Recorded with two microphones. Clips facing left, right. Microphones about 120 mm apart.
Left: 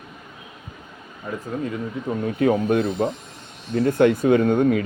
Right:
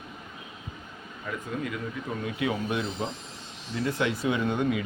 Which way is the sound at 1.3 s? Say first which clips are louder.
Left 5 dB; 35° left (ahead or behind).